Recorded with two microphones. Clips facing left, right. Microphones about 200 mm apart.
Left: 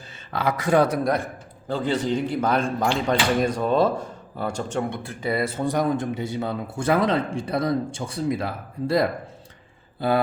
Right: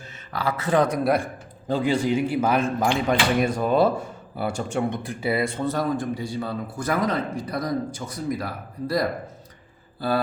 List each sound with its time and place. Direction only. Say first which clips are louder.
0.3 s speech: left 2 dB; 15° left (ahead or behind)
1.0 s a man's voice: right 2 dB; 10° right (ahead or behind)
5.3 s speech: even; centre (ahead or behind)
5.6 s a man's voice: left 2 dB; 15° left (ahead or behind)